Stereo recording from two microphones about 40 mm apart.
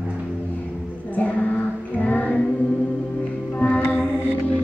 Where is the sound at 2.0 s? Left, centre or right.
Left.